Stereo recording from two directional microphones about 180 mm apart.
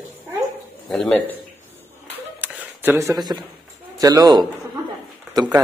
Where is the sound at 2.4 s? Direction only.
10° right (ahead or behind).